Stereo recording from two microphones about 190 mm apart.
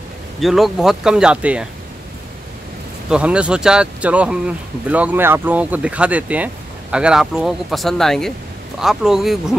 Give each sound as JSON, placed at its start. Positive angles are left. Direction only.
{"t": 0.4, "sound": "speech", "side_deg": 0}
{"t": 3.1, "sound": "speech", "side_deg": -5}